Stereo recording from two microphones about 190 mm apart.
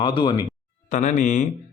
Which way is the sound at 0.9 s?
40° left (ahead or behind).